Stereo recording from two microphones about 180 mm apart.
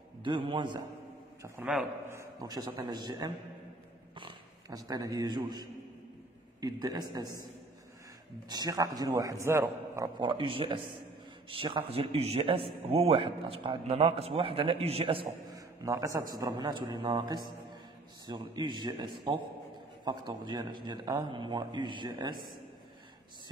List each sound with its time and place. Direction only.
0.2 s a man's voice: 25° right (ahead or behind)
1.4 s a man's voice: 10° right (ahead or behind)
8.5 s a man's voice: 20° right (ahead or behind)
15.5 s a man's voice: 20° right (ahead or behind)
20.1 s a man's voice: 25° right (ahead or behind)